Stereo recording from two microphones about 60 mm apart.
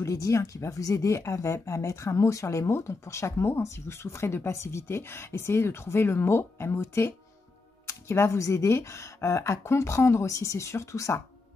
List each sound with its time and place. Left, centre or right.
0.0 s speech: left